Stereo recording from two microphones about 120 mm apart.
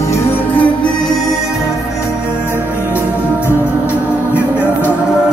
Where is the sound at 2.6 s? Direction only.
15° right (ahead or behind).